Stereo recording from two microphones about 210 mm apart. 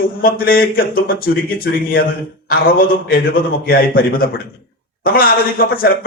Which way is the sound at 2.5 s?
45° left (ahead or behind).